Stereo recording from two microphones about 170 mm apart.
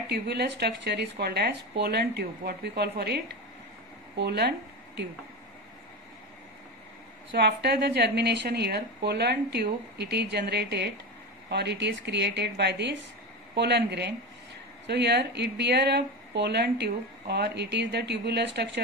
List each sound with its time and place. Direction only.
0.1 s a woman's voice: 75° right (ahead or behind)
7.3 s a woman's voice: 75° right (ahead or behind)
13.6 s speech: 80° right